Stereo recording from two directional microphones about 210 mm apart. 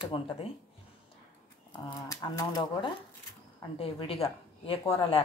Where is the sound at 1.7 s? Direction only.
20° left (ahead or behind).